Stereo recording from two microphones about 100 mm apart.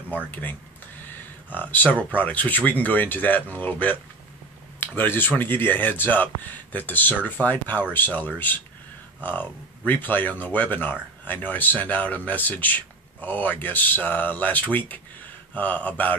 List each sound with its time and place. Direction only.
0.3 s speech: 15° left (ahead or behind)
1.0 s a sound: 20° left (ahead or behind)
2.1 s speech: 15° left (ahead or behind)
4.7 s speech: 20° left (ahead or behind)